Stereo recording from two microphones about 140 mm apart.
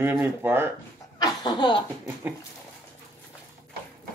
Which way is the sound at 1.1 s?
30° left (ahead or behind).